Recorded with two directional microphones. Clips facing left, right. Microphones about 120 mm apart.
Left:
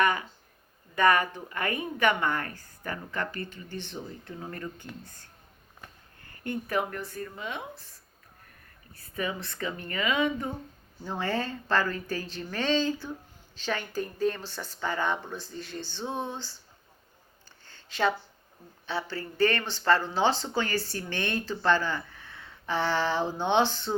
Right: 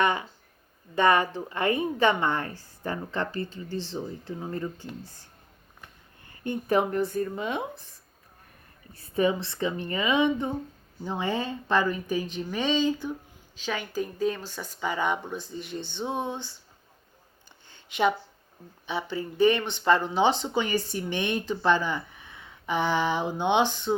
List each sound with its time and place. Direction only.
0.0 s a sound: 25° right (ahead or behind)
0.9 s a woman's voice: 25° right (ahead or behind)
6.2 s a woman's voice: 25° right (ahead or behind)
9.0 s a woman's voice: 25° right (ahead or behind)
17.7 s a sound: 20° right (ahead or behind)
18.9 s speech: 20° right (ahead or behind)